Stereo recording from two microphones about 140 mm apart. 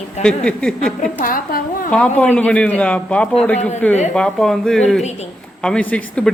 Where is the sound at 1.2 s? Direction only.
90° left.